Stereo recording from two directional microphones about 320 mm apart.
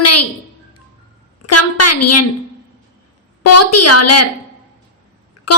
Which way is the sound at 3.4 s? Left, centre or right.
Left.